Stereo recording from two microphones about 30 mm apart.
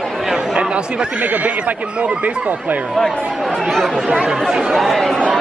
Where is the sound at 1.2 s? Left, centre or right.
Right.